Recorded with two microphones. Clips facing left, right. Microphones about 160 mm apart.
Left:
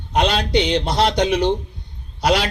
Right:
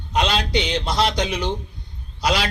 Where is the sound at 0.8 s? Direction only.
60° left (ahead or behind).